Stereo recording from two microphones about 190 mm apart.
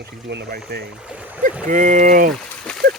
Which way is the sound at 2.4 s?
5° left (ahead or behind).